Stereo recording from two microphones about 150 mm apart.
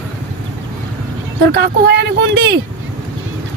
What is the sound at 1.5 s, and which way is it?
Speech, 90° right.